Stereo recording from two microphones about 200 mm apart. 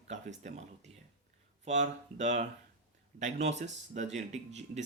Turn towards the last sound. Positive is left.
turn(degrees=-35)  # may be behind; listen again after turning